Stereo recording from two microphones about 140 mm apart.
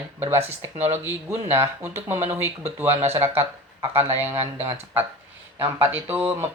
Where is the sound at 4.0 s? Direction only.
15° right (ahead or behind).